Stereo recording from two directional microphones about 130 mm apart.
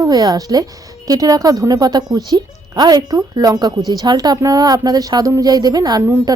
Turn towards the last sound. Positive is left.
turn(degrees=-30)  # may be behind; listen again after turning